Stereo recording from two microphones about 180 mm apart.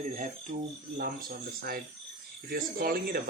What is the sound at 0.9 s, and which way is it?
Speech, 55° right (ahead or behind).